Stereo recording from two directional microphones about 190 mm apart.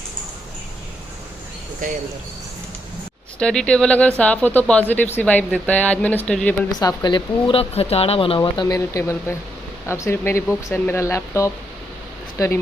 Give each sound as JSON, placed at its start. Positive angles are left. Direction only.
{"t": 1.8, "sound": "speech", "side_deg": -45}
{"t": 3.3, "sound": "speech", "side_deg": 5}
{"t": 6.7, "sound": "speech", "side_deg": 20}